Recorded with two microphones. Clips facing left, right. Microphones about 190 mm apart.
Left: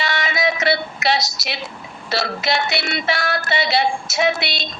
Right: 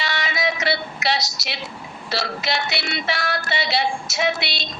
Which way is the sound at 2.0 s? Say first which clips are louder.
Left 4 dB; 50° left (ahead or behind).